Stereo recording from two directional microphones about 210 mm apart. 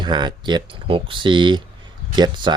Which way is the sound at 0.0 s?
20° right (ahead or behind).